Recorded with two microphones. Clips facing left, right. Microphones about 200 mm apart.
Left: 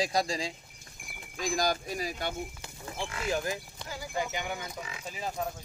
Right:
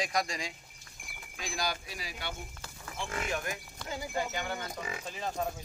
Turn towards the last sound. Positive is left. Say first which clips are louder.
# even
turn(degrees=5)  # may be behind; listen again after turning